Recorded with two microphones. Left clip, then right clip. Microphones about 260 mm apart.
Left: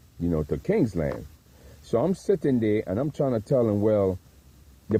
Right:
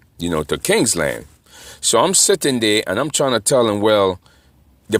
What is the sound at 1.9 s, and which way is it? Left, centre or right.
Speech, centre.